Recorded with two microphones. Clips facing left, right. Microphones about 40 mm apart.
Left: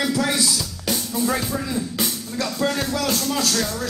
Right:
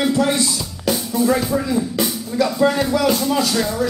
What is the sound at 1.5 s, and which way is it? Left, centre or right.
Speech, centre.